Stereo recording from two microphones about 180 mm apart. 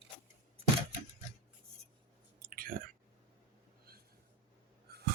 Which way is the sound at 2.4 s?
55° right (ahead or behind).